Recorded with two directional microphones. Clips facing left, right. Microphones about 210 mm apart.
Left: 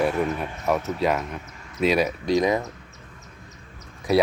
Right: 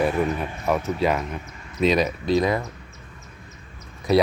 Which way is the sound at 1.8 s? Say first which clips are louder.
Right 1 dB; 10° left (ahead or behind).